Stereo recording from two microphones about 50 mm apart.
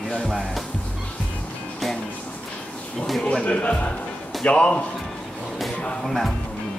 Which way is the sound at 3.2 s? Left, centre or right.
Left.